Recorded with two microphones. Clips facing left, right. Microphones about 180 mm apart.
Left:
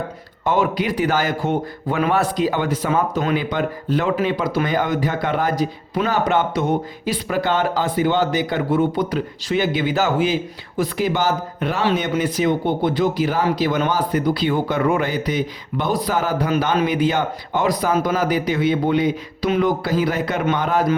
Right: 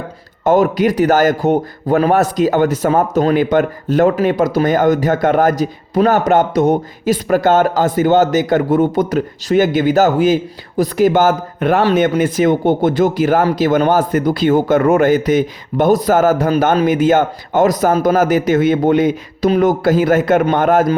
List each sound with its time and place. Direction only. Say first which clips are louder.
0.4 s a man's voice: right 7 dB; 45° right (ahead or behind)